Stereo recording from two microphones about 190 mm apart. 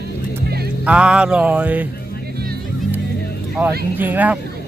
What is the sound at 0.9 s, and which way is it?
Speech, 5° right (ahead or behind).